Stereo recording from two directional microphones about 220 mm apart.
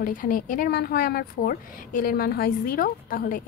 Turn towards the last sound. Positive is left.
turn(degrees=40)  # may be behind; listen again after turning